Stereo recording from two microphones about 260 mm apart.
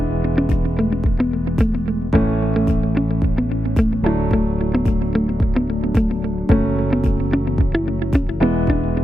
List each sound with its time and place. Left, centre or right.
0.3 s music: centre